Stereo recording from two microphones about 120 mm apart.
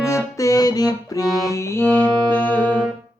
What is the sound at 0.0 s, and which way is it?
Music, 25° left (ahead or behind).